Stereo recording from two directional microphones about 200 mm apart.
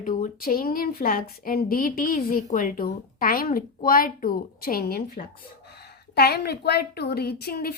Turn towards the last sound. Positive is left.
turn(degrees=50)  # may be behind; listen again after turning